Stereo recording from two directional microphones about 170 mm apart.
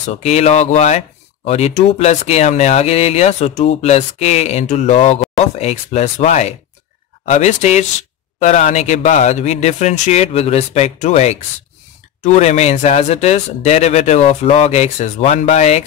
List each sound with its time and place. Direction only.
0.1 s speech: 40° left (ahead or behind)